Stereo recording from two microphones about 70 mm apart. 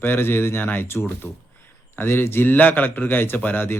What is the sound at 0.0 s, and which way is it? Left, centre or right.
A man's voice, left.